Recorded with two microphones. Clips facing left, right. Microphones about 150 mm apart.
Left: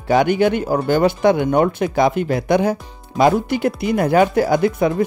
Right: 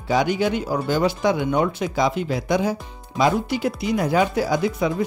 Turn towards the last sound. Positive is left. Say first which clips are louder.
# left 5 dB
turn(degrees=55)  # may be behind; listen again after turning